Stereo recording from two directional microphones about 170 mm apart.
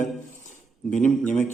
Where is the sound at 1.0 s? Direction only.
5° left (ahead or behind).